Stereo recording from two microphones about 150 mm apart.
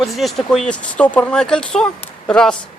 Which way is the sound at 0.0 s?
Centre (ahead or behind).